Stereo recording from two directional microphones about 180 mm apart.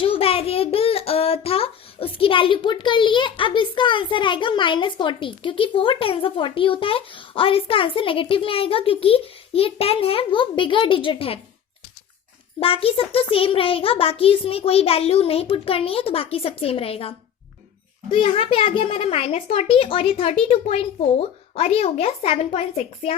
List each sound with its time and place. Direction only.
0.0 s a child's voice: 30° left (ahead or behind)
12.5 s speech: 30° left (ahead or behind)